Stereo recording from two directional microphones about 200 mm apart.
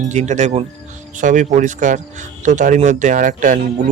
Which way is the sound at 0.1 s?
35° right (ahead or behind).